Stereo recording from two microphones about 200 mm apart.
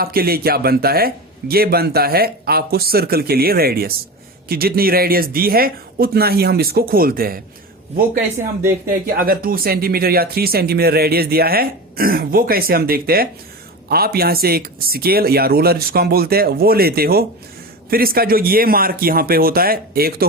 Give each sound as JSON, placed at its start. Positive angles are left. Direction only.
{"t": 0.0, "sound": "a woman's voice", "side_deg": -50}